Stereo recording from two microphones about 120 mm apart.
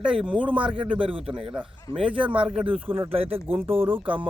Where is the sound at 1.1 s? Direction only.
50° right (ahead or behind).